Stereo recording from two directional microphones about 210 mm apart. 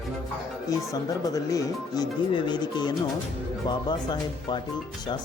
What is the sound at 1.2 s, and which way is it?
Speech, 15° left (ahead or behind).